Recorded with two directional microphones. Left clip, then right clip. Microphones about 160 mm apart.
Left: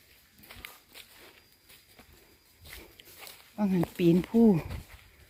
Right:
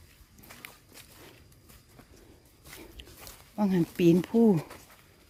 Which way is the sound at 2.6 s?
25° right (ahead or behind).